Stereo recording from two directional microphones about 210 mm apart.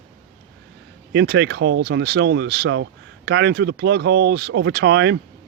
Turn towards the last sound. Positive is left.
turn(degrees=-55)  # may be behind; listen again after turning